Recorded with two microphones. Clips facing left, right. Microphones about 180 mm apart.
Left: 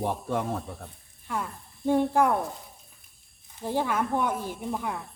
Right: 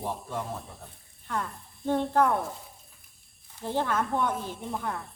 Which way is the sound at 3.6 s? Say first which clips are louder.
Left 1 dB; 10° left (ahead or behind).